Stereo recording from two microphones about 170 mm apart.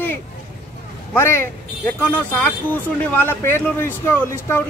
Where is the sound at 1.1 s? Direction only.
15° left (ahead or behind).